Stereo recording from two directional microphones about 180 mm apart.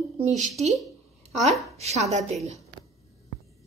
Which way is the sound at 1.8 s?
40° right (ahead or behind).